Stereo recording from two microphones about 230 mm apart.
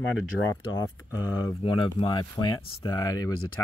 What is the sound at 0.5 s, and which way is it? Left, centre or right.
Speech, centre.